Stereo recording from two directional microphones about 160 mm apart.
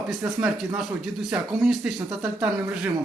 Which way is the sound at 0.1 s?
5° right (ahead or behind).